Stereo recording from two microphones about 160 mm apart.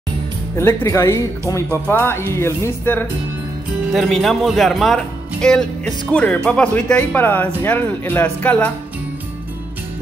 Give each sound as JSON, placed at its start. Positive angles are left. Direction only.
{"t": 0.6, "sound": "speech", "side_deg": 15}
{"t": 3.9, "sound": "speech", "side_deg": 0}